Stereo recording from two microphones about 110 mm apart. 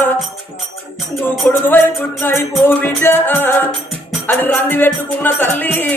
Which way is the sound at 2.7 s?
20° left (ahead or behind).